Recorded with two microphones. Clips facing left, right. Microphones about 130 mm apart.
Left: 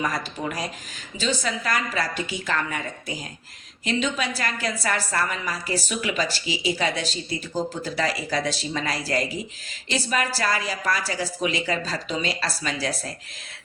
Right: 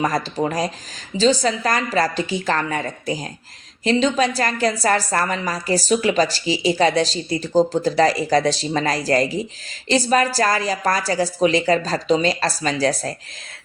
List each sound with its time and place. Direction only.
0.0 s a woman's voice: 40° right (ahead or behind)